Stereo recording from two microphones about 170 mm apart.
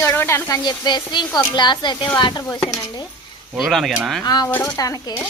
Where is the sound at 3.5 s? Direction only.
Centre (ahead or behind).